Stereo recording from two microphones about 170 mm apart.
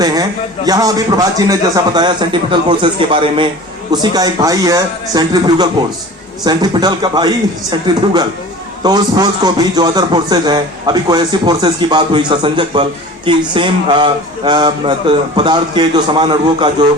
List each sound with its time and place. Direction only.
0.0 s a man's voice: 20° right (ahead or behind)